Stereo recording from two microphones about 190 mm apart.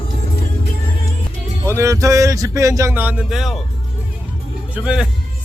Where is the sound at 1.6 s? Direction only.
15° right (ahead or behind).